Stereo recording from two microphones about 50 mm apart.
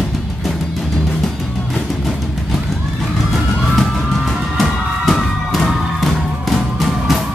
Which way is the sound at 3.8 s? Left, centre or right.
Centre.